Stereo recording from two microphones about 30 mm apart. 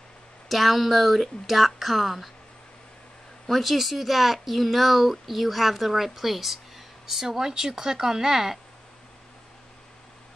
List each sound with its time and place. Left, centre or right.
0.5 s speech: centre
3.4 s speech: centre